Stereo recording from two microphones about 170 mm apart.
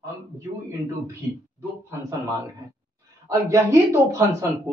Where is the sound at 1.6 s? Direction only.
15° right (ahead or behind).